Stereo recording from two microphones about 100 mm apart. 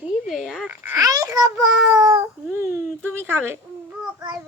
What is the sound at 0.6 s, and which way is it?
Speech, 15° right (ahead or behind).